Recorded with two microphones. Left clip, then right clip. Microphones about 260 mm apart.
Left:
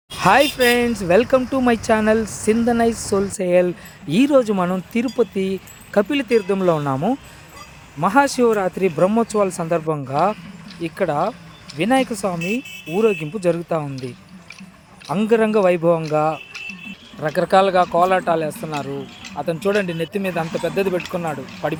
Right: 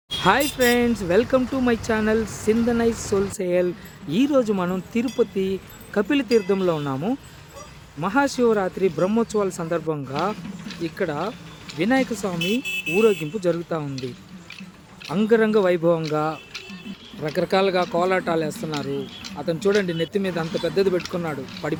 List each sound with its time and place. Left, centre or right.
0.2 s speech: left
15.0 s speech: centre